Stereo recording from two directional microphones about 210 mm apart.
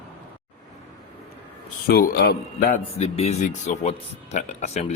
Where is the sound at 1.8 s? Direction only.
45° left (ahead or behind).